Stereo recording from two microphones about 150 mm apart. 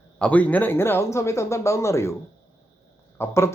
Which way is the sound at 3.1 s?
15° left (ahead or behind).